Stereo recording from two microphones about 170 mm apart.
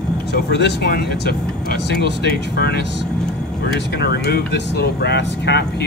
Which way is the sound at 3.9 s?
80° left.